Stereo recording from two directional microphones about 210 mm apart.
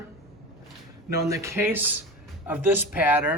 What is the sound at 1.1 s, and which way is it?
Speech, 15° right (ahead or behind).